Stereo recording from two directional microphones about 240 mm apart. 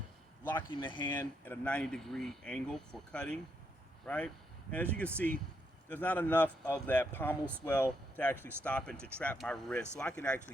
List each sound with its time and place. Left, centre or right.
0.7 s speech: centre
1.1 s speech: centre